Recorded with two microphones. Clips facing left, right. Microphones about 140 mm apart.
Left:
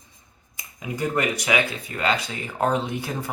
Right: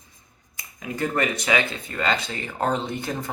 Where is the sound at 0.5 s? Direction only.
15° left (ahead or behind).